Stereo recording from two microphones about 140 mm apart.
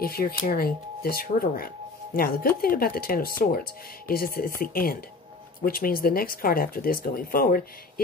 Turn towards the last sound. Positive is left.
turn(degrees=90)